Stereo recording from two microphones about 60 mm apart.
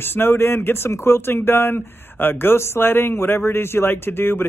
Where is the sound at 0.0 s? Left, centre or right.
Left.